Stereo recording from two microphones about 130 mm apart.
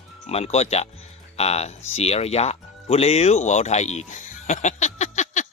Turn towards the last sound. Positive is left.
turn(degrees=65)  # may be behind; listen again after turning